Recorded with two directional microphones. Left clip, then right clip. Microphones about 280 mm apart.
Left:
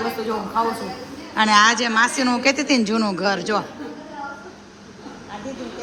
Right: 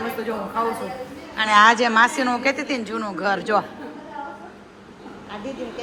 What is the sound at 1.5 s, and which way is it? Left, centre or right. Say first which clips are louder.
A woman's voice: right 2 dB; centre.